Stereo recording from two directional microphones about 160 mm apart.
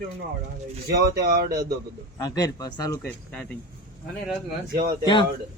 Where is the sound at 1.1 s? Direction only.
75° right (ahead or behind).